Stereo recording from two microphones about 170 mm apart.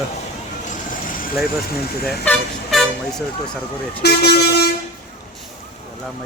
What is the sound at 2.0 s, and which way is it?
Speech, 5° left (ahead or behind).